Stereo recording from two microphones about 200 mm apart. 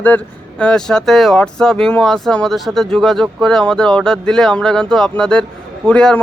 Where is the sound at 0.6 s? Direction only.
5° left (ahead or behind).